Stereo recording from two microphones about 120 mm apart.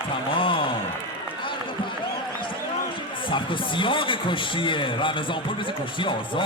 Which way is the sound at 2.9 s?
45° left (ahead or behind).